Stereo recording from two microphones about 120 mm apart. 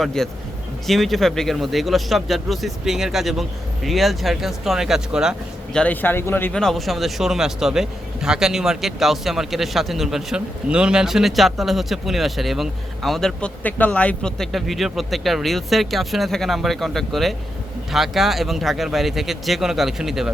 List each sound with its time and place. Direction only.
0.0 s speech: 5° left (ahead or behind)
5.7 s speech: 10° left (ahead or behind)
6.5 s speech: 5° left (ahead or behind)